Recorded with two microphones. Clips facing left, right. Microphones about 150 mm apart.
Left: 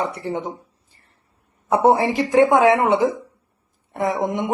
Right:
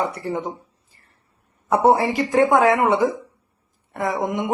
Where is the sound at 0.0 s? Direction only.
20° left (ahead or behind).